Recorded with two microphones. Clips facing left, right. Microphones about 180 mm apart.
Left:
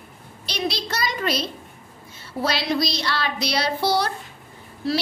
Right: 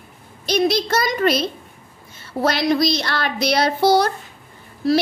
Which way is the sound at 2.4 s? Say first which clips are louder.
Right 5 dB; 50° right (ahead or behind).